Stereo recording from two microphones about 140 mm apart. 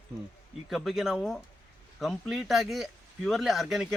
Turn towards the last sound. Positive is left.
turn(degrees=0)  # may be behind; listen again after turning